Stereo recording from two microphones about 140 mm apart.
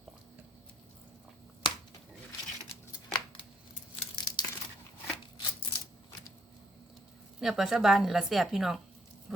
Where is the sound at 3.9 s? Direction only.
30° left (ahead or behind).